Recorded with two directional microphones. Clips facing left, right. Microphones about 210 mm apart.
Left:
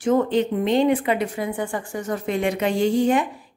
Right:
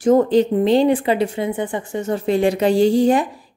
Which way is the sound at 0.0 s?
40° right (ahead or behind).